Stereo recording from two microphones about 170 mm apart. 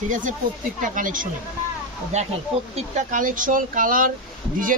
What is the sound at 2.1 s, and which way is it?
Speech, 40° right (ahead or behind).